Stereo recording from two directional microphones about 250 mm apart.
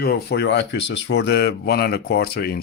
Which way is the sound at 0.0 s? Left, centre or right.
Left.